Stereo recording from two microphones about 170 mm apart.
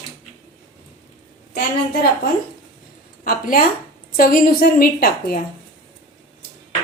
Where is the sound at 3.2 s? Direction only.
55° left (ahead or behind).